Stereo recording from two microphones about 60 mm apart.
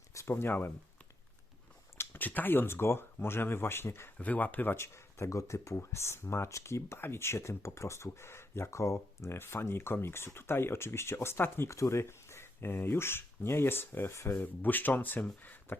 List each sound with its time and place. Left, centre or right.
0.1 s a sound: left
2.0 s speech: left
4.2 s speech: left
4.8 s speech: left
14.3 s speech: left